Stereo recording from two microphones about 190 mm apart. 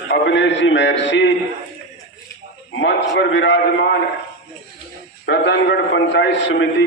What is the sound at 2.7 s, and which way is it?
Speech, 70° left (ahead or behind).